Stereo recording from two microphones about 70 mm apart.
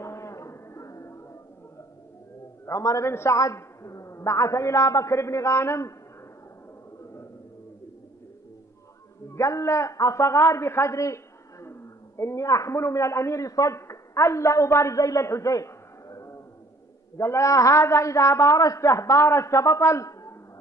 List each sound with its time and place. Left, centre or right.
0.0 s a sound: left
2.6 s a man's voice: left
3.1 s a man's voice: left
3.3 s a man's voice: left
7.0 s a sound: left
9.3 s a man's voice: left